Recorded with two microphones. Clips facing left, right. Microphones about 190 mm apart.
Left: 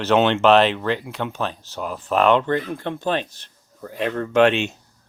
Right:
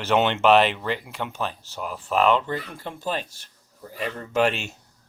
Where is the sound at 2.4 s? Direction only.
60° left (ahead or behind).